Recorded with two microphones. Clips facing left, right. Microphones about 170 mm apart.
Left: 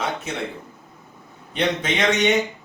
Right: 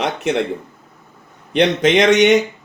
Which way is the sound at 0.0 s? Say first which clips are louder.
Right 8 dB; 70° right (ahead or behind).